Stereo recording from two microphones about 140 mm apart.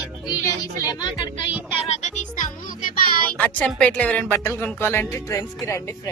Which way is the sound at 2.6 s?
75° left (ahead or behind).